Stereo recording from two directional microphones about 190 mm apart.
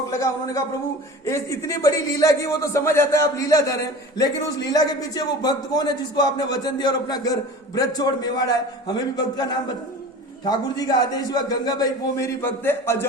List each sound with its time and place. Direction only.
0.1 s a man's voice: 15° left (ahead or behind)